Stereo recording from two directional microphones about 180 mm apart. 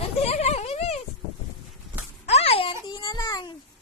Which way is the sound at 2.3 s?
35° left (ahead or behind).